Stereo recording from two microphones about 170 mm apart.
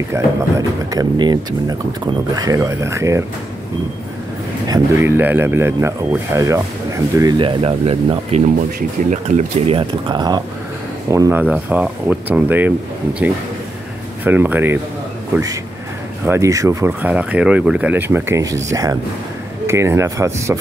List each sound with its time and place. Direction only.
0.1 s speech: 20° right (ahead or behind)
4.6 s speech: 20° right (ahead or behind); by 8.4 s 35° right (ahead or behind)
8.5 s speech: 50° right (ahead or behind); by 11.4 s 15° right (ahead or behind)
11.5 s speech: 5° right (ahead or behind)
14.2 s speech: 10° right (ahead or behind)
16.3 s speech: 20° right (ahead or behind)